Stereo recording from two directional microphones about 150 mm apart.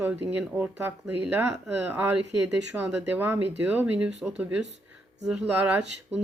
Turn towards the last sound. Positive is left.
turn(degrees=-10)  # may be behind; listen again after turning